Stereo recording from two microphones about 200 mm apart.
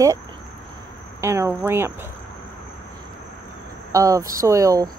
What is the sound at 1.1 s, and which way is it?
Speech, 15° right (ahead or behind).